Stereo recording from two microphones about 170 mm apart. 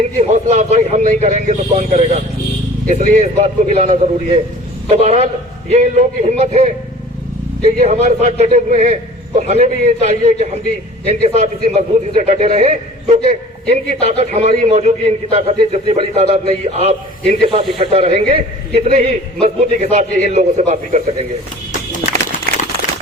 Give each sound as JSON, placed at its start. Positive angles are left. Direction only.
{"t": 0.0, "sound": "a man's voice", "side_deg": -40}